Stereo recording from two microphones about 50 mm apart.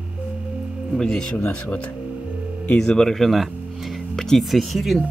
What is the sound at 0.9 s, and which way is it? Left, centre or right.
Speech, centre.